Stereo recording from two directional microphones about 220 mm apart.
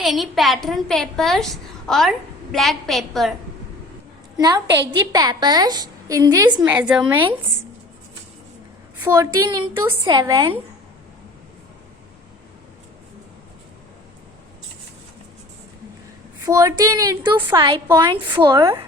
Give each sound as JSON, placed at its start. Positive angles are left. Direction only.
{"t": 0.0, "sound": "a woman's voice", "side_deg": 0}
{"t": 4.4, "sound": "a woman's voice", "side_deg": -15}
{"t": 6.6, "sound": "a woman's voice", "side_deg": -5}
{"t": 9.0, "sound": "a woman's voice", "side_deg": -15}
{"t": 16.5, "sound": "a woman's voice", "side_deg": -15}